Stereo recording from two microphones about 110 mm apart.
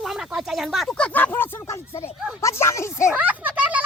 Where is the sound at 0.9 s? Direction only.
10° left (ahead or behind).